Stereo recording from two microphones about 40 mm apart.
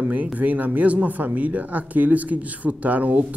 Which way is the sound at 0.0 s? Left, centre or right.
Right.